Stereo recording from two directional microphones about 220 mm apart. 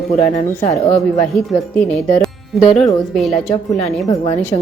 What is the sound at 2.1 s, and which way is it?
Music, centre (ahead or behind).